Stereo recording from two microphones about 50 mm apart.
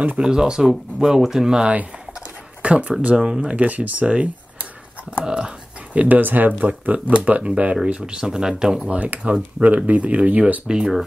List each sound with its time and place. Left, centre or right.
0.2 s speech: centre
1.6 s speech: right
3.5 s speech: right
5.2 s dog: centre
5.9 s speech: right; by 8.9 s centre
8.9 s speech: right
10.7 s speech: centre